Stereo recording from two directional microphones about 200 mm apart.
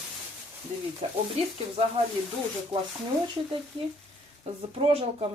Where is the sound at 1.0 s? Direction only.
35° right (ahead or behind).